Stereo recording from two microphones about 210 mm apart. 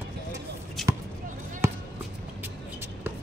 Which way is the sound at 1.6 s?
15° right (ahead or behind).